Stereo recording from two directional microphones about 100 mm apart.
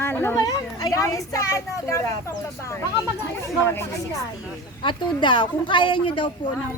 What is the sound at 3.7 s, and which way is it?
Speech, 25° left (ahead or behind).